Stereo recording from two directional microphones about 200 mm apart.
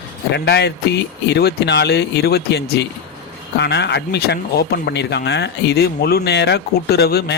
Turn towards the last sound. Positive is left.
turn(degrees=55)  # may be behind; listen again after turning